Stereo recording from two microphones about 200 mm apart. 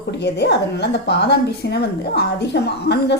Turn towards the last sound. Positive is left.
turn(degrees=55)  # may be behind; listen again after turning